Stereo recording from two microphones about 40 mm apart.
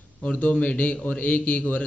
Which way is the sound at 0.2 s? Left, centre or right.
Left.